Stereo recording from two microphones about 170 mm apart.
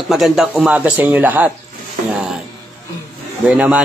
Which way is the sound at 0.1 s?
Centre (ahead or behind).